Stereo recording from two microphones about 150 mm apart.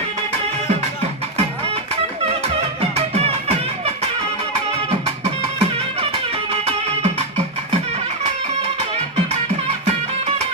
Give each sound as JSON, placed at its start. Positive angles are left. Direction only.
{"t": 2.9, "sound": "music", "side_deg": -45}
{"t": 5.5, "sound": "music", "side_deg": -40}